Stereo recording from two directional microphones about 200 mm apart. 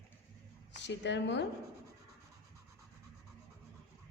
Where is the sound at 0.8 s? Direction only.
60° left (ahead or behind).